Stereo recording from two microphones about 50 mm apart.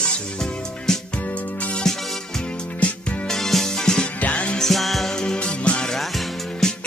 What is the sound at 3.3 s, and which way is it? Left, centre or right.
Music, centre.